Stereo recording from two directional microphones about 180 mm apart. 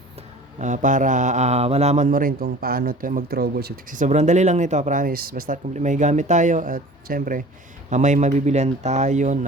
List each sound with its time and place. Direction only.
0.6 s speech: 45° right (ahead or behind)